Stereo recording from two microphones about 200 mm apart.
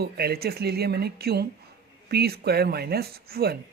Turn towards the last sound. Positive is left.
turn(degrees=-50)  # may be behind; listen again after turning